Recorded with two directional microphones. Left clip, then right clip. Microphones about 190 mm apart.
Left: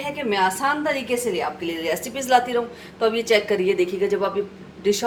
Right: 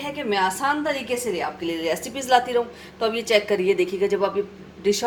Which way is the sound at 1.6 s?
35° right (ahead or behind).